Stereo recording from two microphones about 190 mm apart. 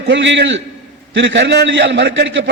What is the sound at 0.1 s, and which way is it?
A man's voice, 70° right (ahead or behind).